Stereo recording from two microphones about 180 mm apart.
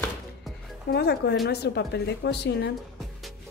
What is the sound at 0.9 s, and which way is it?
A woman's voice, 65° left (ahead or behind).